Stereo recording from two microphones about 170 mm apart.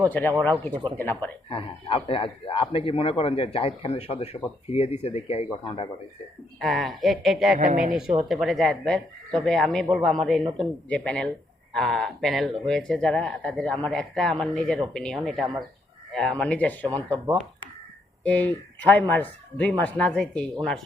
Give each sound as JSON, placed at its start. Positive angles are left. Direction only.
{"t": 0.1, "sound": "speech", "side_deg": 10}
{"t": 0.7, "sound": "speech", "side_deg": -25}
{"t": 1.5, "sound": "speech", "side_deg": 30}
{"t": 6.6, "sound": "speech", "side_deg": 0}
{"t": 7.6, "sound": "speech", "side_deg": -50}
{"t": 8.3, "sound": "speech", "side_deg": 0}
{"t": 18.2, "sound": "speech", "side_deg": 10}